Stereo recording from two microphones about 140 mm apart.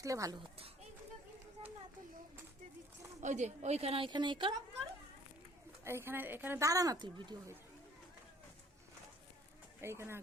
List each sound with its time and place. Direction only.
0.0 s a child's voice: 25° right (ahead or behind)
3.2 s a woman's voice: 60° right (ahead or behind); by 4.5 s 35° right (ahead or behind)
5.8 s speech: 20° right (ahead or behind)
9.8 s speech: 20° right (ahead or behind)